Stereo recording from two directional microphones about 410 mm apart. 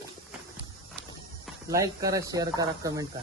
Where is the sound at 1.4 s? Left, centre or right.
Centre.